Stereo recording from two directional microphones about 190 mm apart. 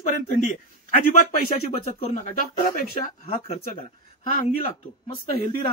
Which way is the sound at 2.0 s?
40° left (ahead or behind).